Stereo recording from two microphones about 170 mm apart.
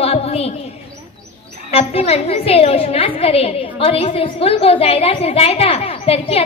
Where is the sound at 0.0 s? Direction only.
35° left (ahead or behind).